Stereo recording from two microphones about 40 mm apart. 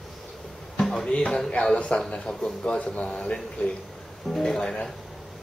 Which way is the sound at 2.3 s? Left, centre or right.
Centre.